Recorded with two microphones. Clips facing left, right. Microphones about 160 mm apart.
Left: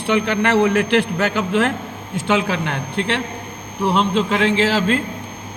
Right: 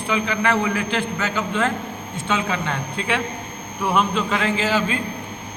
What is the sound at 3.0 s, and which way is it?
Speech, 75° left (ahead or behind).